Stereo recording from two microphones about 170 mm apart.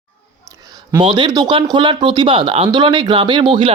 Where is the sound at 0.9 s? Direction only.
25° right (ahead or behind).